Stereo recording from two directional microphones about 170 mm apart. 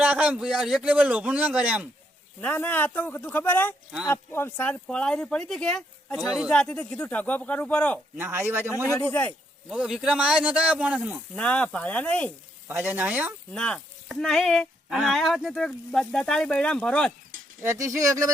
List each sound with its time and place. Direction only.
0.0 s a man's voice: 10° right (ahead or behind)
2.4 s speech: 10° left (ahead or behind)
8.2 s a man's voice: 15° right (ahead or behind)
11.3 s speech: 5° left (ahead or behind)
12.6 s a man's voice: 10° right (ahead or behind)
13.5 s speech: 5° left (ahead or behind)
17.6 s speech: 15° right (ahead or behind)